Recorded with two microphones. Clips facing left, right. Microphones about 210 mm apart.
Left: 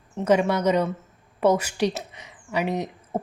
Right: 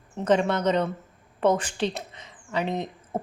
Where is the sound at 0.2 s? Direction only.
10° left (ahead or behind).